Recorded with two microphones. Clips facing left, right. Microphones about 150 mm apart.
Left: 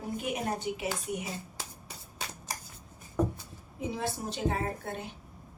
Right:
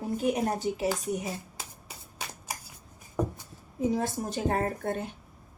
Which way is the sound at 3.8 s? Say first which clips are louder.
Right 6 dB; 40° right (ahead or behind).